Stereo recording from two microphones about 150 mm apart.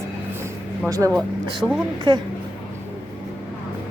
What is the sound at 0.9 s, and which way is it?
A woman's voice, 25° right (ahead or behind).